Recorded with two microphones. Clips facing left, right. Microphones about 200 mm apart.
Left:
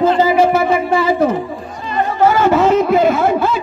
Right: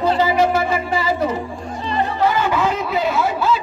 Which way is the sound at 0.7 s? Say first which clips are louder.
Left 6 dB; 55° left (ahead or behind).